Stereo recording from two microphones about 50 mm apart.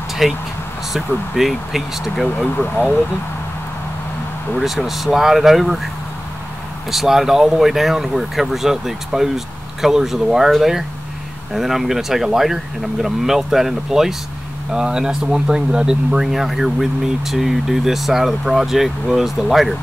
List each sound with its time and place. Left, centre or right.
0.2 s speech: centre
4.6 s speech: centre
6.9 s speech: centre